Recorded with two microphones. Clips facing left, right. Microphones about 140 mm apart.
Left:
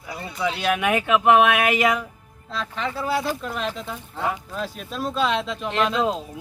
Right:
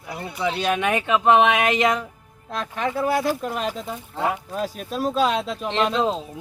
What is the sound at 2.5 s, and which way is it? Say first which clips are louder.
Speech: right 3 dB; 50° right (ahead or behind).